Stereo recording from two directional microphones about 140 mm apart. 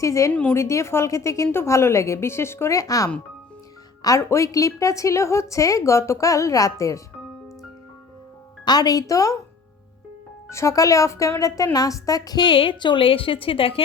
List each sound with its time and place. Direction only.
0.0 s a woman's voice: 20° left (ahead or behind)
8.6 s a woman's voice: 30° left (ahead or behind)
10.5 s a woman's voice: 20° left (ahead or behind); by 13.8 s 40° left (ahead or behind)